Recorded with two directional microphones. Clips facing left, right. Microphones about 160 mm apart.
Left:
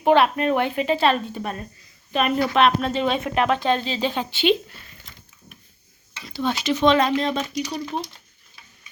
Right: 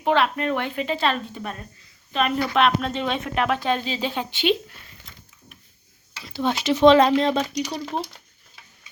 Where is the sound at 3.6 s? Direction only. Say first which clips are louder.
Left 2 dB; 10° right (ahead or behind).